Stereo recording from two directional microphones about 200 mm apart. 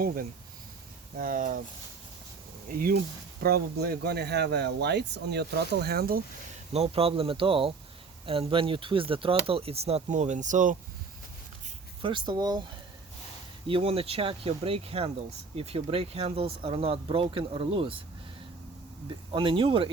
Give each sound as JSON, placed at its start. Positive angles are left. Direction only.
{"t": 0.0, "sound": "speech", "side_deg": -45}
{"t": 2.6, "sound": "speech", "side_deg": -45}
{"t": 6.7, "sound": "speech", "side_deg": -30}
{"t": 12.0, "sound": "speech", "side_deg": -25}
{"t": 13.7, "sound": "speech", "side_deg": -25}
{"t": 19.3, "sound": "speech", "side_deg": -25}